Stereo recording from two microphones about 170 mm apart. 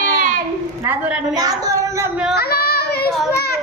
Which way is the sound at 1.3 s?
20° right (ahead or behind).